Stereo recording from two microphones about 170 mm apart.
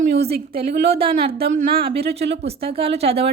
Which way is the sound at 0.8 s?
35° right (ahead or behind).